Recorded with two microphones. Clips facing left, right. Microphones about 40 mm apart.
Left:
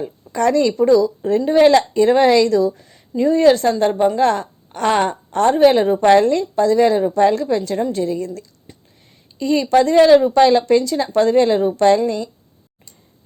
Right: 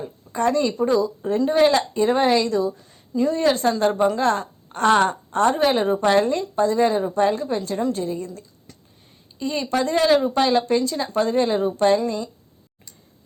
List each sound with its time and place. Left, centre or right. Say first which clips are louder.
0.3 s a woman's voice: left 5 dB; left
0.9 s speech: left 8 dB; right
1.5 s a woman's voice: left 6 dB; left
2.7 s a sound: left 2 dB; left
3.2 s a woman's voice: left 7 dB; left
3.7 s a woman's voice: left 3 dB; left
5.3 s a woman's voice: left 8 dB; left
8.7 s a sound: left 4 dB; left
9.4 s a woman's voice: left 8 dB; left